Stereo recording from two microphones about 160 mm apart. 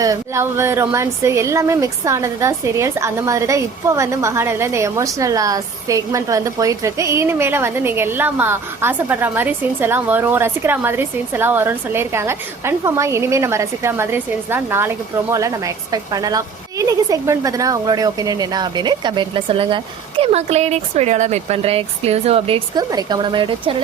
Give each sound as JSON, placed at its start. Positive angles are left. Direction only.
{"t": 0.0, "sound": "speech", "side_deg": -20}